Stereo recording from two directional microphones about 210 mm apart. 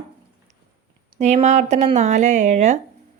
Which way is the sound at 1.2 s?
35° right (ahead or behind).